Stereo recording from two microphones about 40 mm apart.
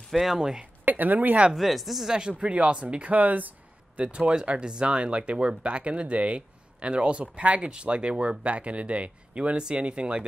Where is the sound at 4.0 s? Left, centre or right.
Right.